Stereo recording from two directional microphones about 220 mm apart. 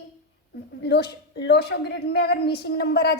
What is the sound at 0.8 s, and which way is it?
A woman's voice, 50° left (ahead or behind).